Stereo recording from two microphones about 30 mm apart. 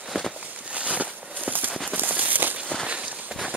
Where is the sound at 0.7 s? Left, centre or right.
Right.